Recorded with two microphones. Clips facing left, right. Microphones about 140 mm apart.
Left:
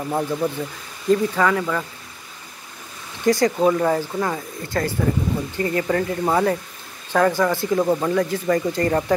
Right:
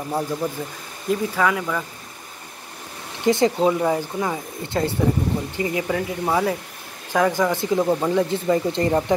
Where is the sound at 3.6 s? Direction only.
10° right (ahead or behind).